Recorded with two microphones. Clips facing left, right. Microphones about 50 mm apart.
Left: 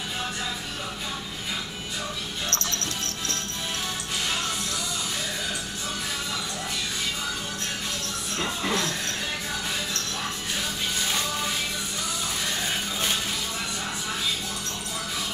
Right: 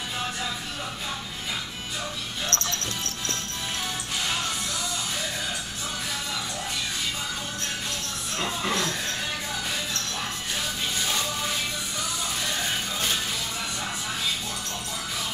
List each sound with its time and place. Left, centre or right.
2.5 s music: right
8.4 s music: centre